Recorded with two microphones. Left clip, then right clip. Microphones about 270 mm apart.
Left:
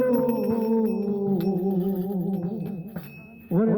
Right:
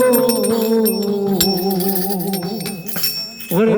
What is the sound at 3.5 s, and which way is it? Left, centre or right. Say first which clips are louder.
Wind chime: right 9 dB; right.